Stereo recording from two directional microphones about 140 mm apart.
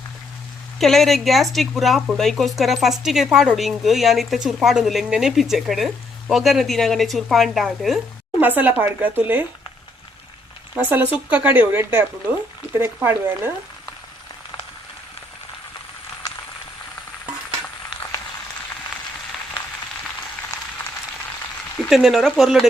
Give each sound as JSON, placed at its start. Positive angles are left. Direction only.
{"t": 0.8, "sound": "speech", "side_deg": 0}
{"t": 8.4, "sound": "speech", "side_deg": -10}
{"t": 10.8, "sound": "speech", "side_deg": -10}
{"t": 21.8, "sound": "speech", "side_deg": 0}